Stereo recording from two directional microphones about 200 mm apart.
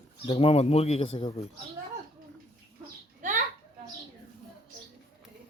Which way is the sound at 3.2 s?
40° right (ahead or behind).